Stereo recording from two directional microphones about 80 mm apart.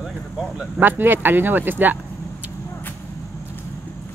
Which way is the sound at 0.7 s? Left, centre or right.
Right.